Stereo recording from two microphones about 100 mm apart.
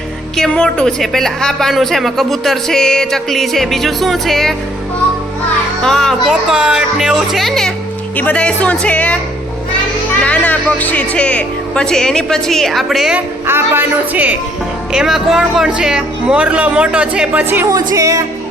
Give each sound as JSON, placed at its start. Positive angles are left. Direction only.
{"t": 0.3, "sound": "a woman's voice", "side_deg": 5}
{"t": 5.8, "sound": "a woman's voice", "side_deg": 5}
{"t": 6.5, "sound": "a woman's voice", "side_deg": -5}
{"t": 8.1, "sound": "speech", "side_deg": 15}
{"t": 10.2, "sound": "speech", "side_deg": 15}
{"t": 13.1, "sound": "speech", "side_deg": -20}
{"t": 14.9, "sound": "speech", "side_deg": -5}
{"t": 17.7, "sound": "a woman's voice", "side_deg": -35}